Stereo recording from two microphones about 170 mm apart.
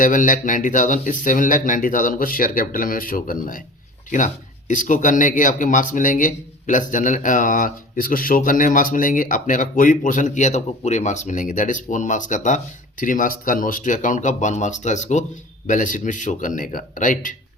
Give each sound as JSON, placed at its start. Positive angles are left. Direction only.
{"t": 0.0, "sound": "speech", "side_deg": 50}
{"t": 4.7, "sound": "speech", "side_deg": 50}